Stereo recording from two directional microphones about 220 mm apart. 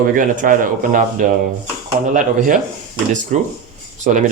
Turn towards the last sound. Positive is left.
turn(degrees=-35)  # may be behind; listen again after turning